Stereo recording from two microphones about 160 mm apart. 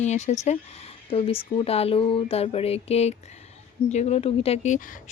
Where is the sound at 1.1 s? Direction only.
35° left (ahead or behind).